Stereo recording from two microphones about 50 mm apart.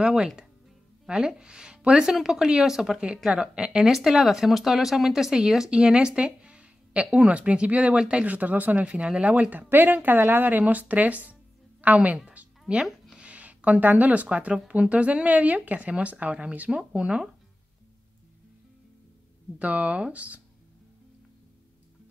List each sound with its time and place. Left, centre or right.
0.0 s speech: centre
3.3 s speech: centre
3.9 s speech: centre; by 8.8 s right
8.8 s speech: right
12.3 s a sound: right
13.2 s speech: right
16.7 s speech: centre
19.6 s speech: right